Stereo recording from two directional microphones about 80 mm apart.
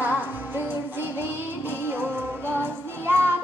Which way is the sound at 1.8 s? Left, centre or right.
Right.